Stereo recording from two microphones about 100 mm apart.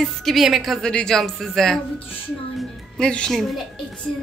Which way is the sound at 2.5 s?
5° left (ahead or behind).